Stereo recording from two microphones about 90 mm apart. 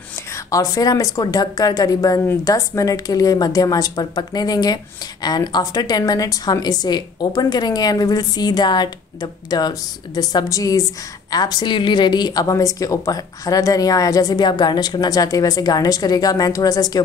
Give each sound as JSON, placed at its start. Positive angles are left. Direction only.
{"t": 0.5, "sound": "a woman's voice", "side_deg": 40}